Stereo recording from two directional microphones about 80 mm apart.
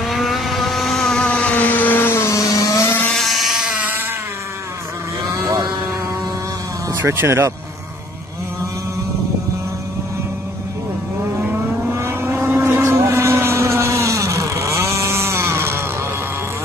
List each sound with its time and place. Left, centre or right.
0.0 s vehicle: centre; by 2.9 s left
3.1 s a sound: centre
5.2 s vehicle: right
7.0 s speech: right
11.3 s vehicle: right